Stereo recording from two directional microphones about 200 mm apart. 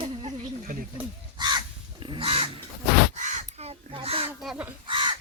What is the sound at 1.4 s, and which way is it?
Crow, 20° right (ahead or behind).